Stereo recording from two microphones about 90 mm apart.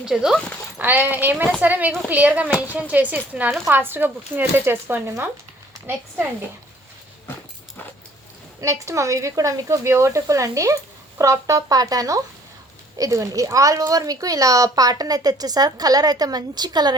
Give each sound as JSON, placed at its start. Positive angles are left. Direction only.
{"t": 0.0, "sound": "speech", "side_deg": -5}
{"t": 0.3, "sound": "speech", "side_deg": 10}
{"t": 0.8, "sound": "speech", "side_deg": -20}
{"t": 8.6, "sound": "a woman's voice", "side_deg": -35}